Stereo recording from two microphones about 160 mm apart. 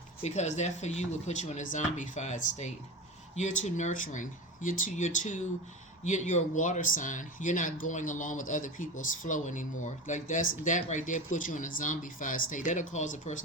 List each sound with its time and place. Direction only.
0.2 s speech: 45° left (ahead or behind)